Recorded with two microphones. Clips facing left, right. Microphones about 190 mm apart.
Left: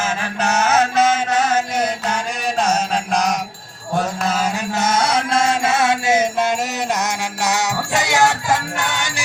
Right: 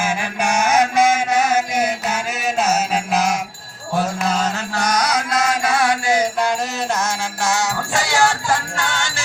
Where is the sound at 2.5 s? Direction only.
5° right (ahead or behind).